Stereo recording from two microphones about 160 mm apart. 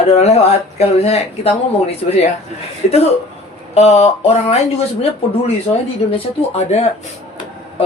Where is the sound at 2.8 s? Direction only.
55° left (ahead or behind).